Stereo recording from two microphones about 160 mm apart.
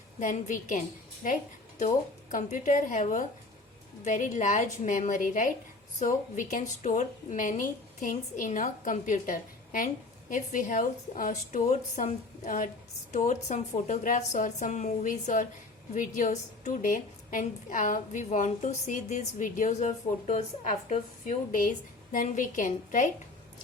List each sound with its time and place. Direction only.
0.2 s a woman's voice: 55° left (ahead or behind)
1.8 s a woman's voice: 55° left (ahead or behind)